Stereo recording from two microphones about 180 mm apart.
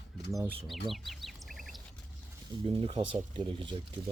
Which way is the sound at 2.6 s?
30° right (ahead or behind).